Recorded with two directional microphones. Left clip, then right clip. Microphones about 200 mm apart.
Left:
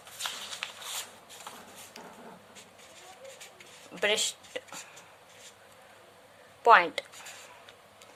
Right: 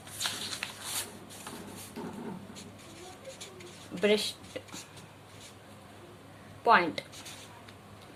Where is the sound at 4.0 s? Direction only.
55° left (ahead or behind).